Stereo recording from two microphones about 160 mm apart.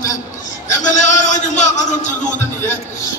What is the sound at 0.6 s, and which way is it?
A man's voice, 50° left (ahead or behind).